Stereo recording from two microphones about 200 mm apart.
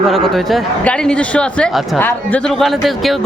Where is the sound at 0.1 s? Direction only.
Centre (ahead or behind).